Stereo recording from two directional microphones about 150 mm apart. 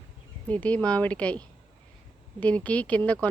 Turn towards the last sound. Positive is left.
turn(degrees=10)  # may be behind; listen again after turning